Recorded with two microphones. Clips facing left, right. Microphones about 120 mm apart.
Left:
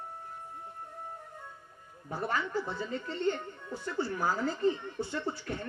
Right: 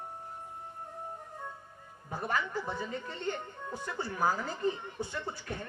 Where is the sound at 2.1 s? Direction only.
15° right (ahead or behind).